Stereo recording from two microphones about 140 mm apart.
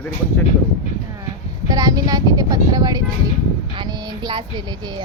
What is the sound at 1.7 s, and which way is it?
Speech, 25° right (ahead or behind).